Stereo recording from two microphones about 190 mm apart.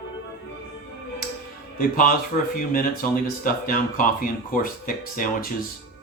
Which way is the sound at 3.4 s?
50° left (ahead or behind).